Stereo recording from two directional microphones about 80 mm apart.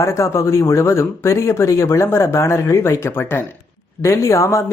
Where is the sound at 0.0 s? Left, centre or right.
Left.